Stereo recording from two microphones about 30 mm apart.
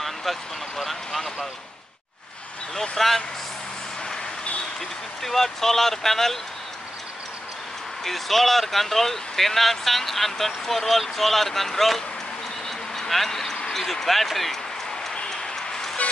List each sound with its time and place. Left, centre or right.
0.0 s speech: centre
3.0 s speech: centre
5.2 s speech: centre
8.0 s speech: centre
12.6 s a sound: centre
13.7 s speech: centre
15.2 s a sound: centre